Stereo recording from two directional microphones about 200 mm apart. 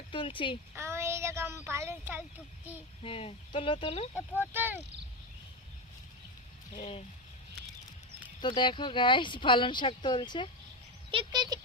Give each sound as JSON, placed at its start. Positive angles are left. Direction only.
{"t": 0.1, "sound": "speech", "side_deg": 25}
{"t": 0.7, "sound": "a child's voice", "side_deg": -15}
{"t": 3.0, "sound": "speech", "side_deg": 25}
{"t": 4.4, "sound": "speech", "side_deg": -10}
{"t": 6.7, "sound": "speech", "side_deg": 30}
{"t": 8.4, "sound": "speech", "side_deg": 25}
{"t": 11.1, "sound": "a sound", "side_deg": -25}